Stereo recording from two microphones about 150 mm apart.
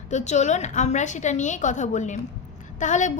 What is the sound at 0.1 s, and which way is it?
A woman's voice, 50° left (ahead or behind).